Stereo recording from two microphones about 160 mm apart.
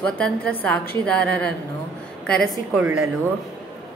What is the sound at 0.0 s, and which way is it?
A woman's voice, 10° left (ahead or behind).